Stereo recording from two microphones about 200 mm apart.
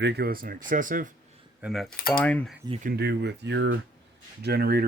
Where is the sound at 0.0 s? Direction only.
55° right (ahead or behind).